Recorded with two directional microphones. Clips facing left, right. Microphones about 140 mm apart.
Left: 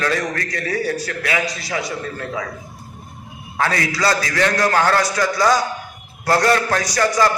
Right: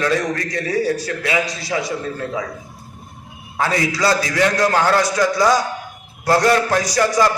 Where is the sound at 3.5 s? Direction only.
15° right (ahead or behind).